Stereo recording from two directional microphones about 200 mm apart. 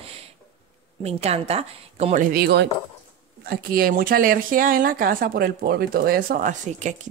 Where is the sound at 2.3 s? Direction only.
50° right (ahead or behind); by 7.0 s 35° right (ahead or behind).